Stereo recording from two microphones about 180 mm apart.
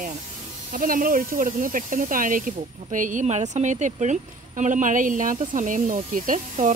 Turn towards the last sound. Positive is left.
turn(degrees=-45)  # may be behind; listen again after turning